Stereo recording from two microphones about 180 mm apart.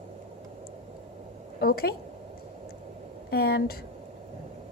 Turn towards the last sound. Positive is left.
turn(degrees=60)  # may be behind; listen again after turning